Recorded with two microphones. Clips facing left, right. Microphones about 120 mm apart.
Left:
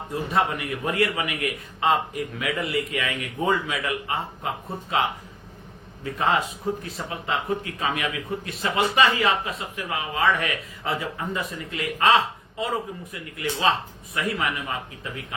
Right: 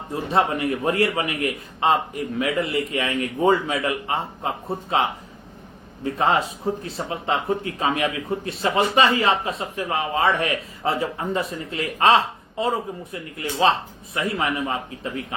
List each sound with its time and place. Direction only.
0.1 s a man's voice: 30° right (ahead or behind)
6.1 s a man's voice: 30° right (ahead or behind)